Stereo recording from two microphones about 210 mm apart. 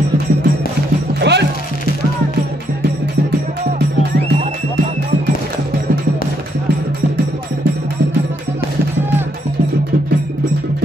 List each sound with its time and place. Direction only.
1.2 s music: 55° right (ahead or behind)